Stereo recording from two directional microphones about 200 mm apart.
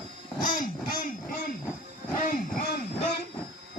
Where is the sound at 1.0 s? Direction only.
45° left (ahead or behind).